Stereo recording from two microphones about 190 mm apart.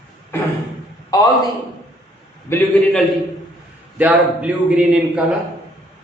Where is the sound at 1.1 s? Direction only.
20° left (ahead or behind).